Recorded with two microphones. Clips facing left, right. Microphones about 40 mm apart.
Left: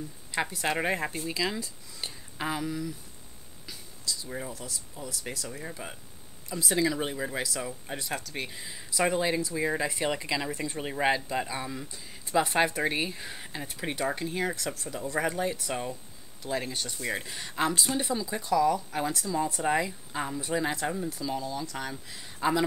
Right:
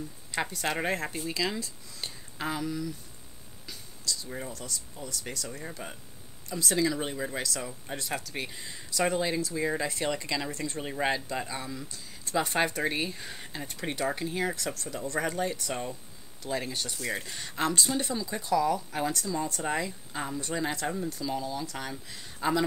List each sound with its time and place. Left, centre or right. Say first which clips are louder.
0.3 s speech: left 2 dB; centre
12.4 s speech: left 2 dB; centre